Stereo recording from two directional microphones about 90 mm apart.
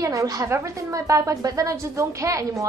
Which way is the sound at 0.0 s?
40° right (ahead or behind).